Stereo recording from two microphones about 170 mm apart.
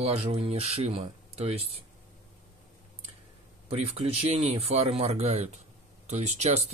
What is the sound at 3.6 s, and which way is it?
Speech, 35° right (ahead or behind).